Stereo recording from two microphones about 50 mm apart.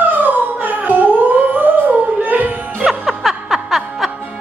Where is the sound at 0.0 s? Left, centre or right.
Right.